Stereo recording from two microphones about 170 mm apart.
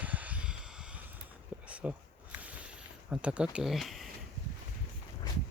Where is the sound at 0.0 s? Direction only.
10° right (ahead or behind).